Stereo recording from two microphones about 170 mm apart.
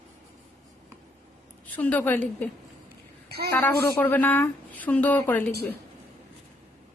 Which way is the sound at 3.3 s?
70° right (ahead or behind).